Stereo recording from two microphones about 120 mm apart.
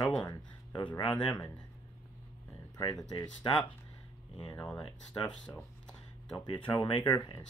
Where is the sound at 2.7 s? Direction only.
30° left (ahead or behind).